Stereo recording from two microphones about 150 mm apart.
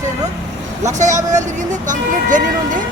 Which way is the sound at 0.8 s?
50° right (ahead or behind).